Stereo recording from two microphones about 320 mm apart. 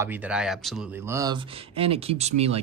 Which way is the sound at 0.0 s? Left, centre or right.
Centre.